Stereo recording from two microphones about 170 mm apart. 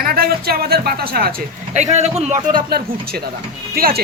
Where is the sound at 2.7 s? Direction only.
65° right (ahead or behind).